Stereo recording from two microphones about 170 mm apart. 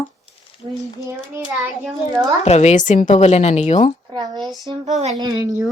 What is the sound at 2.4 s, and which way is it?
Speech, 40° left (ahead or behind).